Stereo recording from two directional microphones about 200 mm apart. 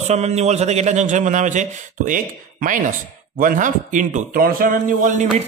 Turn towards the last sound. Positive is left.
turn(degrees=-40)  # may be behind; listen again after turning